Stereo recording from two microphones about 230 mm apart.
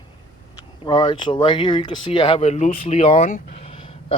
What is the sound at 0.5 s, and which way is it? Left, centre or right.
Speech, centre.